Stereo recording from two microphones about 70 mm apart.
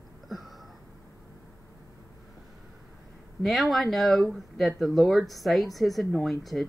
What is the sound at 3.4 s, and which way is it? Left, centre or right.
A woman's voice, centre.